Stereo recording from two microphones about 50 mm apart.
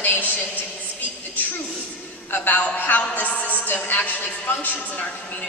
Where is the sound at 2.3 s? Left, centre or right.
Left.